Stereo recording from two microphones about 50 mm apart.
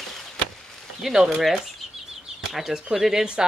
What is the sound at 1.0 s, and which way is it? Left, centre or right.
Speech, centre.